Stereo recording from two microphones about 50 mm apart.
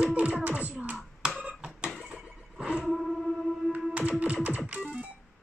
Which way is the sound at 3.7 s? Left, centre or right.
Right.